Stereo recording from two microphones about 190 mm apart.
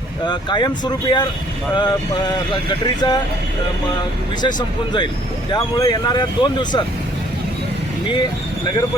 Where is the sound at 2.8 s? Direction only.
20° left (ahead or behind).